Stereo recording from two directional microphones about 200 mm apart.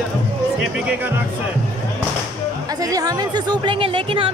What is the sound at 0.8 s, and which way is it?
Speech, 10° right (ahead or behind).